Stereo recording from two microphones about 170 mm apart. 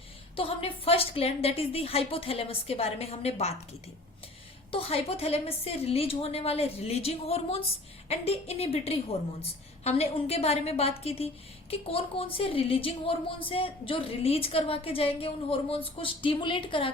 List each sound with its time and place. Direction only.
0.3 s a woman's voice: 35° left (ahead or behind)